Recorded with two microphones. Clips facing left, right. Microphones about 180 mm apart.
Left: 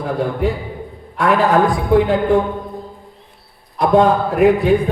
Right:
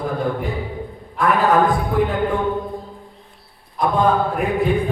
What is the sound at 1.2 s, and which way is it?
Speech, 80° left.